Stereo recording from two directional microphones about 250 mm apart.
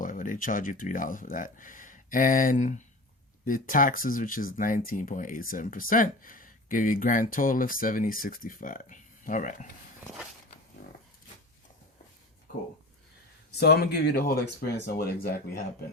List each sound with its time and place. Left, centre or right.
0.0 s speech: left
13.6 s speech: left